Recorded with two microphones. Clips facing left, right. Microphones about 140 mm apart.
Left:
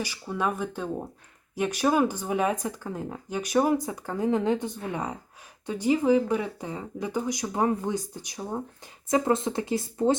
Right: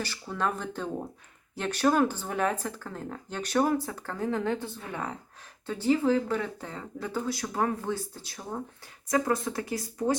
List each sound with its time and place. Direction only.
0.0 s speech: 10° left (ahead or behind)